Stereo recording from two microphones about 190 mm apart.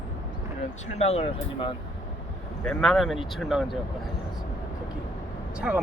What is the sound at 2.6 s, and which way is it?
Speech, centre (ahead or behind).